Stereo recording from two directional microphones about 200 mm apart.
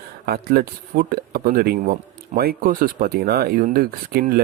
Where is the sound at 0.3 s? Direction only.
50° right (ahead or behind).